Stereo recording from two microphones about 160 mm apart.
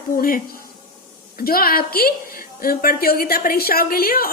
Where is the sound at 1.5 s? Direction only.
70° left (ahead or behind).